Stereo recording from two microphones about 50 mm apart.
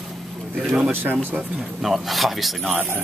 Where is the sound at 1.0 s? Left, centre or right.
Right.